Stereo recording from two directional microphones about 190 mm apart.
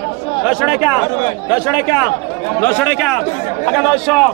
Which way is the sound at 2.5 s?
10° left (ahead or behind).